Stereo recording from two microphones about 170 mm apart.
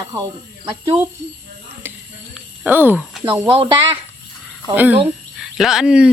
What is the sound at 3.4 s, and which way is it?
Speech, 30° right (ahead or behind).